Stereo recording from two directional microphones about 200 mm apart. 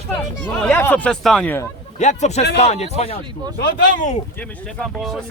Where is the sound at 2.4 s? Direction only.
55° left (ahead or behind).